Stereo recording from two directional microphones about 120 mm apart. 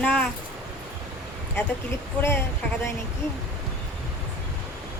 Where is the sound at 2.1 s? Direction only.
20° left (ahead or behind).